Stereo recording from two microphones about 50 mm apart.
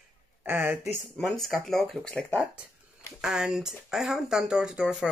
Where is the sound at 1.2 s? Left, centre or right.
Centre.